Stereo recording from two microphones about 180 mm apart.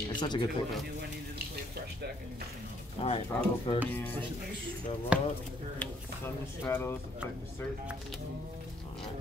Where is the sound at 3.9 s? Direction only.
10° left (ahead or behind).